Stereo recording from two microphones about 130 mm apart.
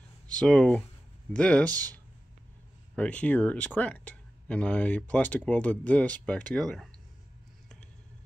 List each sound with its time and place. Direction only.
0.3 s speech: 5° left (ahead or behind)
1.7 s speech: 30° right (ahead or behind)
3.0 s speech: 10° left (ahead or behind)